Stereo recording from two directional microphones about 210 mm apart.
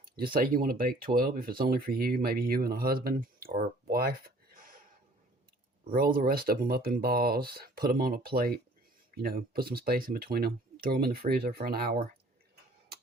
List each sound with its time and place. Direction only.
0.0 s speech: 45° right (ahead or behind)
4.5 s a sound: 40° right (ahead or behind)
5.9 s speech: 45° right (ahead or behind)